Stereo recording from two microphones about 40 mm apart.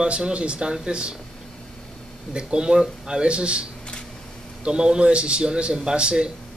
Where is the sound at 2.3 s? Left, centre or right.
Right.